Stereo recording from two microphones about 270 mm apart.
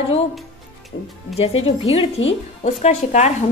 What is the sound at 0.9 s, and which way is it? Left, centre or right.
Speech, left.